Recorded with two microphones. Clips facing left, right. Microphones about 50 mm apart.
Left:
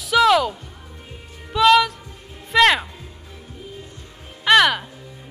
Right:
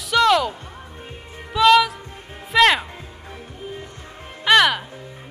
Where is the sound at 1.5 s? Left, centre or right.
Centre.